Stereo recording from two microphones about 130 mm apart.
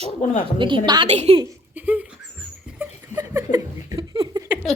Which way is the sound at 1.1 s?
55° right (ahead or behind).